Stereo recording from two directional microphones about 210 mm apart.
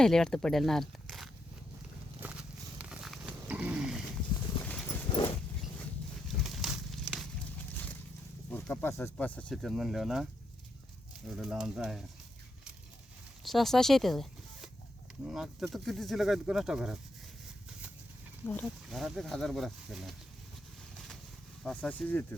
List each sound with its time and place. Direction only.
0.0 s speech: centre (ahead or behind)
2.2 s a sound: 5° right (ahead or behind)
4.6 s clip-clop: 5° left (ahead or behind)
5.0 s a sound: 25° left (ahead or behind)
6.4 s a sound: centre (ahead or behind)
8.4 s speech: 10° left (ahead or behind)
11.3 s speech: 5° right (ahead or behind)
13.4 s speech: centre (ahead or behind)
18.4 s speech: 5° left (ahead or behind)
21.6 s speech: 5° left (ahead or behind)